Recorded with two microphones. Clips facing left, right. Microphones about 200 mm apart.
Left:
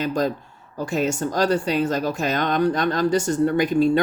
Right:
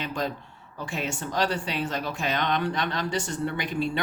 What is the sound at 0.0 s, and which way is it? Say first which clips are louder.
A woman's voice: left 8 dB; 40° left (ahead or behind).